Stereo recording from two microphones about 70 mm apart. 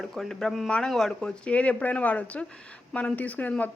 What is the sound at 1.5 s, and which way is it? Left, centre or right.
Speech, centre.